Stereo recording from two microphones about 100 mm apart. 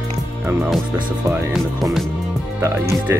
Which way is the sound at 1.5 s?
5° right (ahead or behind).